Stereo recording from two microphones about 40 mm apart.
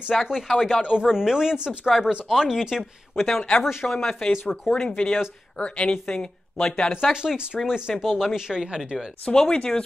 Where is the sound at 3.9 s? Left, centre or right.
Centre.